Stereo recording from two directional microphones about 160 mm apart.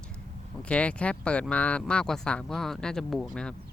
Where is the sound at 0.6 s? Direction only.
5° left (ahead or behind).